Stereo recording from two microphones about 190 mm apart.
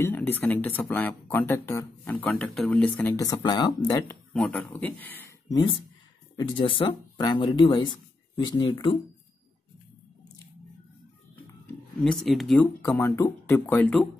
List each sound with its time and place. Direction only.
0.0 s speech: 10° left (ahead or behind)
4.3 s speech: 5° left (ahead or behind)
6.3 s speech: 25° left (ahead or behind)
11.6 s speech: 5° left (ahead or behind)